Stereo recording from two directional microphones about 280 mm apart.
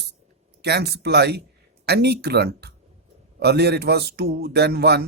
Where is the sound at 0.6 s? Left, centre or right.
Right.